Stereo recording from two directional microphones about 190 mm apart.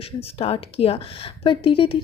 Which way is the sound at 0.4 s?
30° left (ahead or behind).